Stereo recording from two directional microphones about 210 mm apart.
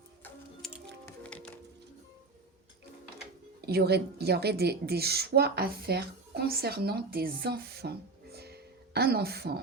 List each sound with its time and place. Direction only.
0.6 s music: centre (ahead or behind)
3.7 s a woman's voice: 50° right (ahead or behind)